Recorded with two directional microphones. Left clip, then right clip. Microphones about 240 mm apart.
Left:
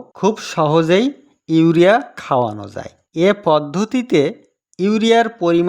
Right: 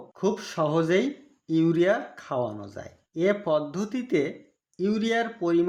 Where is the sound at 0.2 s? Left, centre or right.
Left.